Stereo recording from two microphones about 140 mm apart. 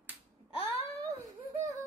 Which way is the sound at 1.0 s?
25° right (ahead or behind).